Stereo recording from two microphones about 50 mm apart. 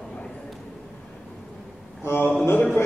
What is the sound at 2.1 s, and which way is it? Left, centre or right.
Speech, left.